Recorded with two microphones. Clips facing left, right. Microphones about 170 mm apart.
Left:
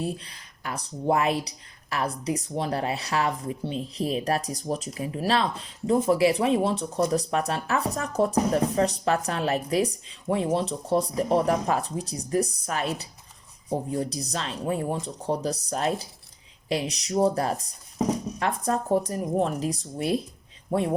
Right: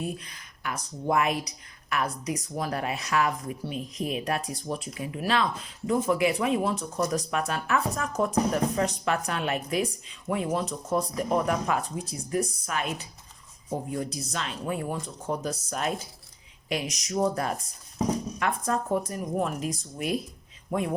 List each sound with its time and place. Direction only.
0.0 s speech: 30° left (ahead or behind)